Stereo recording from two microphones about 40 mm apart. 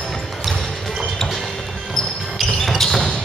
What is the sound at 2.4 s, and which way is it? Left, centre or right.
Basketball bounce, centre.